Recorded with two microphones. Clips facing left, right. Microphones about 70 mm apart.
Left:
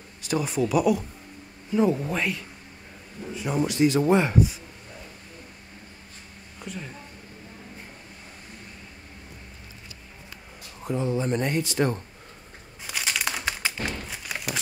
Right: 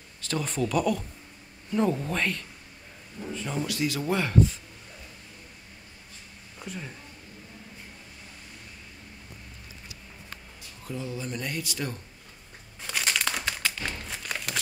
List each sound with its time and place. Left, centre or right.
0.2 s speech: centre
6.6 s a woman's voice: centre
10.8 s speech: left
12.8 s crumpling: centre
13.5 s tap: left
14.0 s a sound: centre